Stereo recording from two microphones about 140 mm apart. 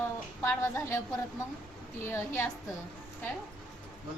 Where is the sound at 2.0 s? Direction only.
20° left (ahead or behind).